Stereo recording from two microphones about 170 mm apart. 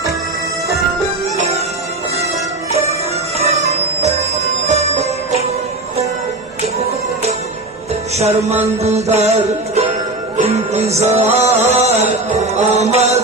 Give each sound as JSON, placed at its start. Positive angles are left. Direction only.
{"t": 1.4, "sound": "music", "side_deg": -40}
{"t": 3.3, "sound": "music", "side_deg": -40}
{"t": 8.1, "sound": "music", "side_deg": -40}